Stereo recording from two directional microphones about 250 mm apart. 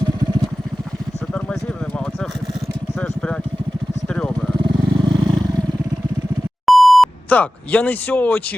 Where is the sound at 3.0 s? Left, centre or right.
Centre.